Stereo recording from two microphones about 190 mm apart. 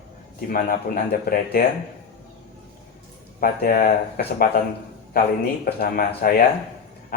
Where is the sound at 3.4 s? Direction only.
45° left (ahead or behind).